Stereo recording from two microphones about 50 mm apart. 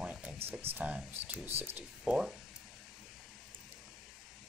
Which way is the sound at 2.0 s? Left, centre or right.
Centre.